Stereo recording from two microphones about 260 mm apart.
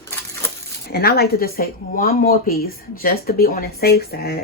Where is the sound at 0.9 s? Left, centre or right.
Left.